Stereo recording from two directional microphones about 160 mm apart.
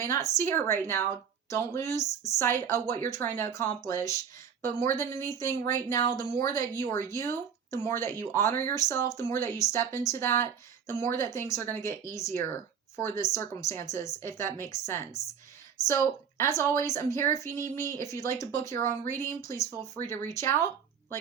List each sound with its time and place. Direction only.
0.0 s a woman's voice: 15° left (ahead or behind)